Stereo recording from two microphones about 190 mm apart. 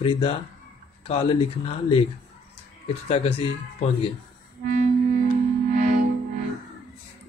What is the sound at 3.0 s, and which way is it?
Speech, 30° left (ahead or behind).